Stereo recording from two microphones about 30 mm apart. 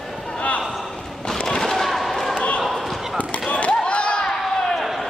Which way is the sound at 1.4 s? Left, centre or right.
Centre.